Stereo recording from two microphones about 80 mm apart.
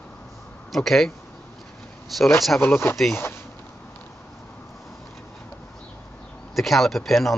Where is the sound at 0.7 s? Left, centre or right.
Centre.